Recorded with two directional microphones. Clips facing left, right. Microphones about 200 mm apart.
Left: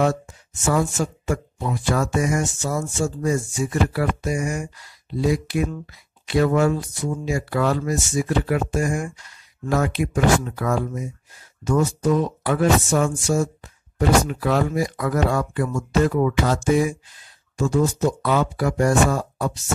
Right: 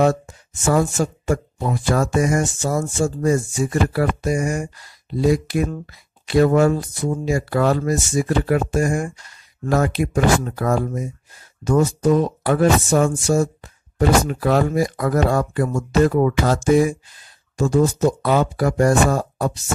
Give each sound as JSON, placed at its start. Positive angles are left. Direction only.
{"t": 0.0, "sound": "speech", "side_deg": -40}